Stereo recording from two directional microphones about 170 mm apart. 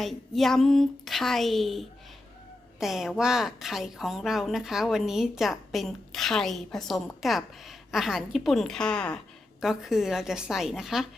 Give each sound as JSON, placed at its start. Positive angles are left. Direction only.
{"t": 0.0, "sound": "a woman's voice", "side_deg": 0}